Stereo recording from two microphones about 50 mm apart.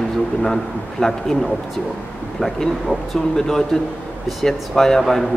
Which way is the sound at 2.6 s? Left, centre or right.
Centre.